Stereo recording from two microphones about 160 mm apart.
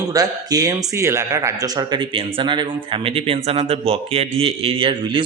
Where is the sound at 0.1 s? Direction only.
25° right (ahead or behind).